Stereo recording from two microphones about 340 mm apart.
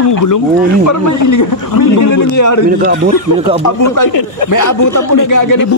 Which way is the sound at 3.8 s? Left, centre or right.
Left.